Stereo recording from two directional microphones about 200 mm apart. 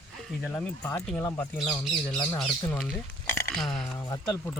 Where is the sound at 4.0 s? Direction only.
15° left (ahead or behind).